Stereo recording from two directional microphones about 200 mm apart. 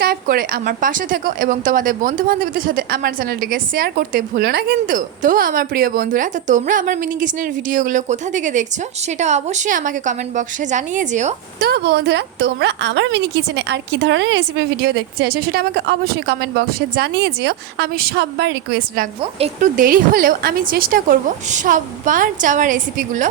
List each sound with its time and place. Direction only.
0.0 s a woman's voice: 50° right (ahead or behind)
11.6 s a woman's voice: 55° right (ahead or behind)
19.4 s speech: 30° right (ahead or behind)
19.7 s a woman's voice: 45° right (ahead or behind)